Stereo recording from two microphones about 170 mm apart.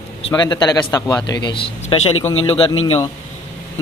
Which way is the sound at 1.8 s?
35° left (ahead or behind).